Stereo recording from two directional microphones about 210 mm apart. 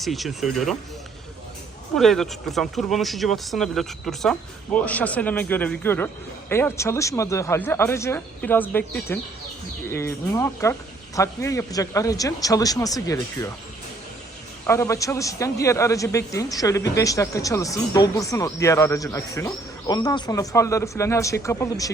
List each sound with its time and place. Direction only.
0.0 s speech: centre (ahead or behind)
2.0 s speech: centre (ahead or behind)
14.7 s speech: 15° left (ahead or behind)